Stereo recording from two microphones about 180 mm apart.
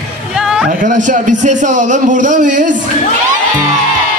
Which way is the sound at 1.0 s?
45° right (ahead or behind).